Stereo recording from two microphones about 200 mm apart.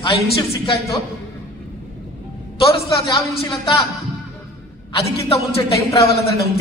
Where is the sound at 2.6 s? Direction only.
25° left (ahead or behind).